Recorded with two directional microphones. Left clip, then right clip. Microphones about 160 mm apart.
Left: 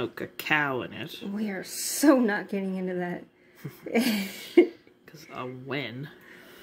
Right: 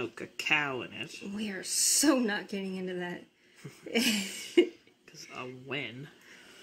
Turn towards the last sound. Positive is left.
turn(degrees=5)  # may be behind; listen again after turning